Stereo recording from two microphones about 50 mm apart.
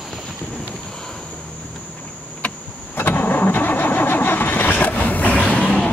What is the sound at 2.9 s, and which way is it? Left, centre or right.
Vehicle, left.